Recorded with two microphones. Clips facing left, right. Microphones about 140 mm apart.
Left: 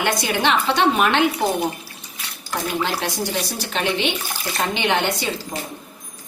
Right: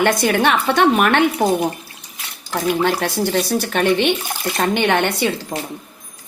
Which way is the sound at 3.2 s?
55° right (ahead or behind).